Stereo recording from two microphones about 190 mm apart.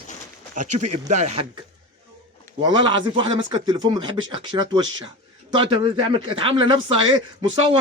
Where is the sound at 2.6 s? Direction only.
25° right (ahead or behind).